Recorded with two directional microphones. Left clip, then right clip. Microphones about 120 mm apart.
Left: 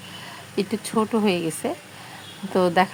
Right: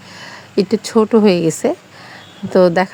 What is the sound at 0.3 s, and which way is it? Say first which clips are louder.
Speech: right 11 dB; 40° right (ahead or behind).